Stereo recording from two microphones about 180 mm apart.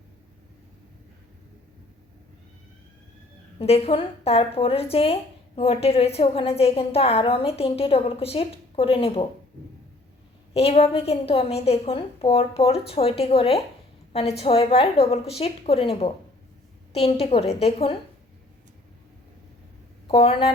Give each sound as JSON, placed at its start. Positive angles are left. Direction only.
{"t": 3.6, "sound": "a woman's voice", "side_deg": 30}
{"t": 10.5, "sound": "a woman's voice", "side_deg": 35}
{"t": 20.1, "sound": "speech", "side_deg": 30}